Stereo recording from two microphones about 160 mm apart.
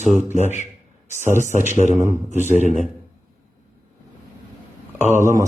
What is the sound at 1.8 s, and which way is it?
Speech, 50° right (ahead or behind).